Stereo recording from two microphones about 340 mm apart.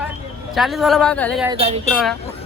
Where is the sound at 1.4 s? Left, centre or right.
Centre.